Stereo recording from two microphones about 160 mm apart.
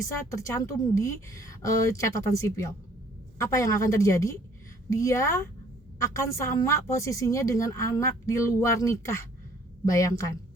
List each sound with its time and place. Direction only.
0.0 s a woman's voice: 20° left (ahead or behind)